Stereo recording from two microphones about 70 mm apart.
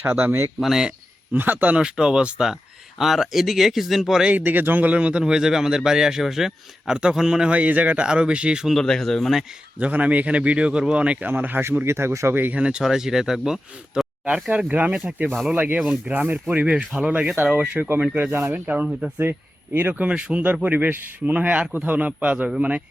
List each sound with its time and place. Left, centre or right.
0.0 s speech: right
0.6 s speech: centre
1.3 s speech: right; by 4.3 s centre
4.3 s speech: right
8.7 s speech: centre
9.7 s speech: right
11.3 s speech: right
11.9 s speech: right
12.3 s speech: right
12.5 s speech: centre
18.0 s speech: centre
18.3 s speech: right; by 22.8 s centre